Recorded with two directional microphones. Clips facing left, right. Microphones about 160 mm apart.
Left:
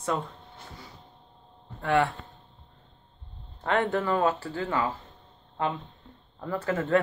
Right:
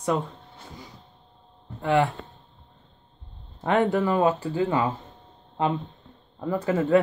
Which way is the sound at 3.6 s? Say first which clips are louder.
Right 4 dB; 15° right (ahead or behind).